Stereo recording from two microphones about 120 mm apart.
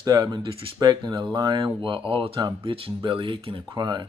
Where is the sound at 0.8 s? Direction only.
35° right (ahead or behind).